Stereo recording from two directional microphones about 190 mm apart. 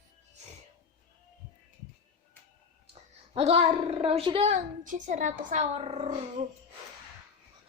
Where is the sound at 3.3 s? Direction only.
30° right (ahead or behind).